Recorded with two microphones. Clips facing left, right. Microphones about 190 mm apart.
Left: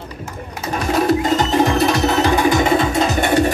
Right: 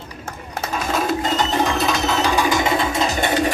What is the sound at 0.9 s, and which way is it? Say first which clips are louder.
Music: left 6 dB; 55° left (ahead or behind).